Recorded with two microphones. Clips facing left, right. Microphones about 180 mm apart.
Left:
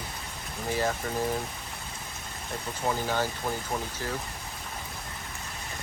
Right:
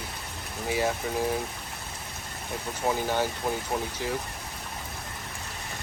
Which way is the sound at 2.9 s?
15° right (ahead or behind).